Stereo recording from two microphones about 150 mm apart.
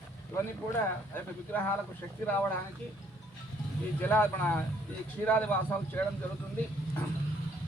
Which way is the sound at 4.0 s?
10° left (ahead or behind).